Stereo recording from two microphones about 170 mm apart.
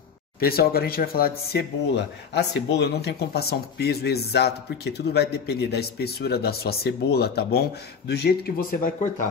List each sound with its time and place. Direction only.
0.4 s speech: 65° left (ahead or behind)